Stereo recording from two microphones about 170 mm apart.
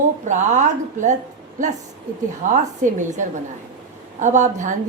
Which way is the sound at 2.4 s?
45° right (ahead or behind).